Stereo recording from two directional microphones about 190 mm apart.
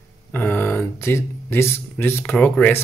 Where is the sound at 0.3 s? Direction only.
10° left (ahead or behind).